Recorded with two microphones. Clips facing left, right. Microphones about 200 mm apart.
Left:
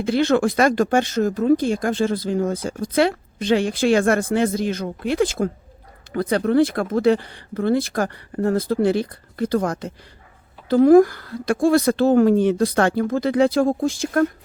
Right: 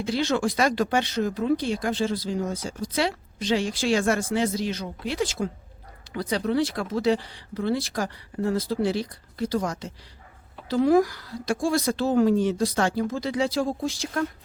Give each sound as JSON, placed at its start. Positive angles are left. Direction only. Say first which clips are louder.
{"t": 0.0, "sound": "speech", "louder": "left 6 dB", "side_deg": 55}